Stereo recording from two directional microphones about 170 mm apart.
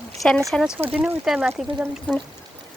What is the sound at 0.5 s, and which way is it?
Speech, 5° left (ahead or behind).